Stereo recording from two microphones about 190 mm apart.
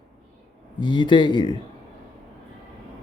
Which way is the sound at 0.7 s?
25° left (ahead or behind).